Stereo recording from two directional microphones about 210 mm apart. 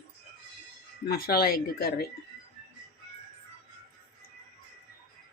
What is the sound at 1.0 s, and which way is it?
Speech, 45° left (ahead or behind).